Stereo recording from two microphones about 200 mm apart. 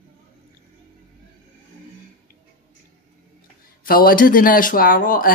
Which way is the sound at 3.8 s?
45° left (ahead or behind).